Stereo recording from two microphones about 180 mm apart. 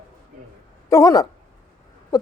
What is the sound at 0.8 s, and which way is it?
Speech, 20° left (ahead or behind).